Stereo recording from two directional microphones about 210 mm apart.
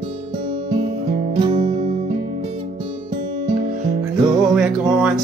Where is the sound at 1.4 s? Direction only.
30° right (ahead or behind).